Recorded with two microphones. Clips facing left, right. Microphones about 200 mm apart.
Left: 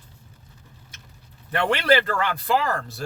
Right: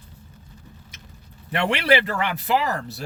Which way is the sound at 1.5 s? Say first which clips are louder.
Even; 10° right (ahead or behind).